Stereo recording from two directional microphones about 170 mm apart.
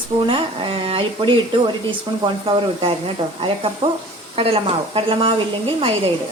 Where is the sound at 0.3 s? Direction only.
30° right (ahead or behind).